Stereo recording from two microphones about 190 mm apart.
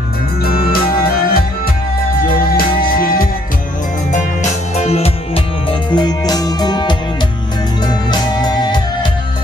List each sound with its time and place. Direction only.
0.4 s music: 50° left (ahead or behind)
2.5 s music: 50° left (ahead or behind)
4.1 s music: 35° left (ahead or behind)